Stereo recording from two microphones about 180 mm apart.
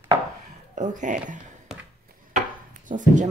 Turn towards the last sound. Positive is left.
turn(degrees=-45)  # may be behind; listen again after turning